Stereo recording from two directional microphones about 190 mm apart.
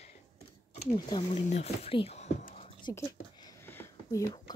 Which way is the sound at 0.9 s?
20° left (ahead or behind).